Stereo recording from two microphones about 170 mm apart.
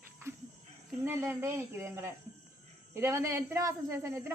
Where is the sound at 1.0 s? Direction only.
15° right (ahead or behind).